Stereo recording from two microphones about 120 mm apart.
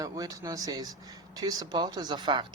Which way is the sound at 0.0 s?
30° right (ahead or behind).